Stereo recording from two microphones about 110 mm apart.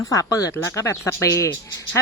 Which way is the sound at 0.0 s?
30° left (ahead or behind).